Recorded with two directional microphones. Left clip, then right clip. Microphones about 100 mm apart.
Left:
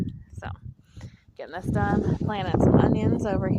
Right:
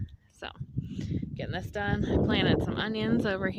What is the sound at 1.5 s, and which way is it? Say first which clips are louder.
Speech: left 6 dB; 5° right (ahead or behind).